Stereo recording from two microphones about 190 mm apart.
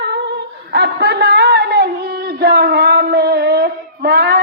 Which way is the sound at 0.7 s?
60° right (ahead or behind).